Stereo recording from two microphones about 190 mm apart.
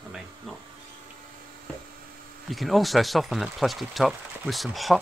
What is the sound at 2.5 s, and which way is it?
Speech, centre (ahead or behind).